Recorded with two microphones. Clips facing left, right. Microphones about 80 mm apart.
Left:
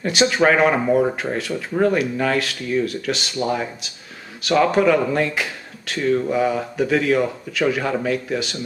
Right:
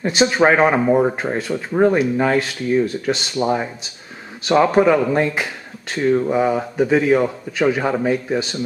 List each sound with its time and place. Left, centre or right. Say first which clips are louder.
0.3 s speech: right 2 dB; right